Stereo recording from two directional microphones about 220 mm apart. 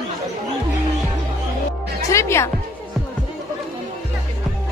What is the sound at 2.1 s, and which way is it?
Music, 10° left (ahead or behind).